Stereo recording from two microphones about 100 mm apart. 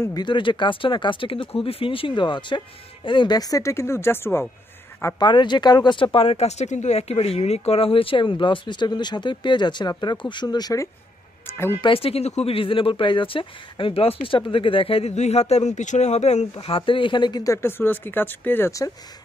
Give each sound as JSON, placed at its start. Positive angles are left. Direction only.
{"t": 0.1, "sound": "speech", "side_deg": 50}
{"t": 5.2, "sound": "speech", "side_deg": 50}
{"t": 11.8, "sound": "speech", "side_deg": 70}
{"t": 17.5, "sound": "speech", "side_deg": 25}